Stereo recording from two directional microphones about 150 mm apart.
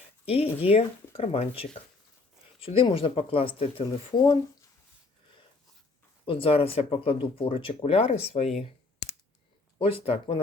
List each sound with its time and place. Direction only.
0.3 s speech: 40° left (ahead or behind)
6.2 s speech: 40° left (ahead or behind)
9.0 s scissors: 90° left
9.7 s speech: 35° left (ahead or behind)